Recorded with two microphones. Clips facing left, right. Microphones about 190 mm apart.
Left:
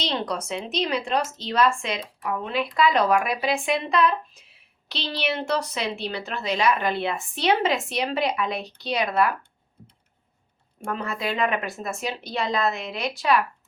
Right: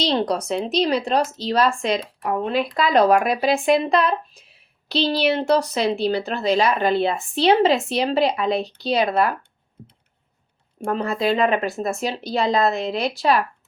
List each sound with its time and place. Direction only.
0.0 s speech: 35° right (ahead or behind)
10.8 s speech: 30° right (ahead or behind)